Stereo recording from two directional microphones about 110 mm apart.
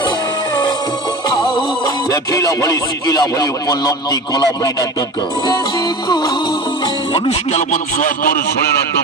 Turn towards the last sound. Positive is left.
turn(degrees=90)